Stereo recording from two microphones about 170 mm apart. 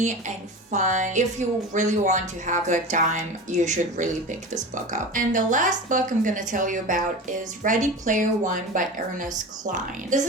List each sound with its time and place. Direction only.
0.7 s a woman's voice: 45° right (ahead or behind)